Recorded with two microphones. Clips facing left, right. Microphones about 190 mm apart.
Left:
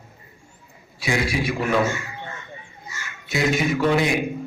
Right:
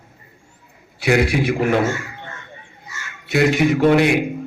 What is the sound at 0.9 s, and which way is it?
Speech, 65° right (ahead or behind).